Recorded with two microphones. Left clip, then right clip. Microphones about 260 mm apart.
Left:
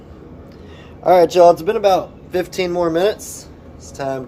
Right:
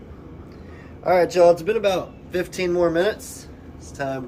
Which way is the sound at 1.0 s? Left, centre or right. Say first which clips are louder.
Left 6 dB; left.